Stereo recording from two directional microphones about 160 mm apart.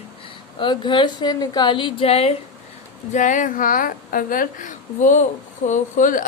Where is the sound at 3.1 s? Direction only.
50° left (ahead or behind).